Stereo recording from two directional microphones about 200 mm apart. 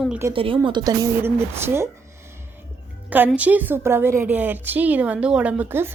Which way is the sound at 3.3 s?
10° right (ahead or behind).